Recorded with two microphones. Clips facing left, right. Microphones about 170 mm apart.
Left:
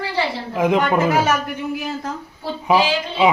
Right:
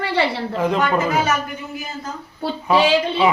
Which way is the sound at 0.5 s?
15° left (ahead or behind).